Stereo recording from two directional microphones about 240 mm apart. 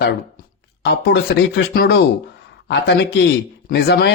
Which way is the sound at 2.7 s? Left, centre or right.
Left.